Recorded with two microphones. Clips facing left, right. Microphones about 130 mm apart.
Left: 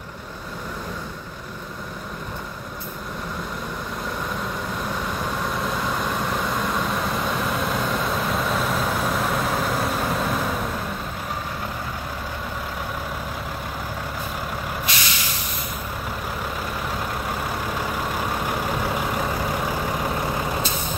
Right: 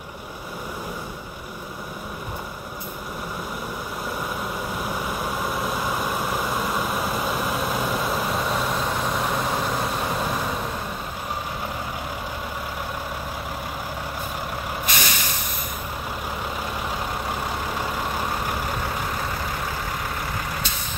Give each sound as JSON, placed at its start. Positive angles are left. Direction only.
{"t": 4.8, "sound": "vehicle", "side_deg": -10}
{"t": 14.9, "sound": "vehicle", "side_deg": -50}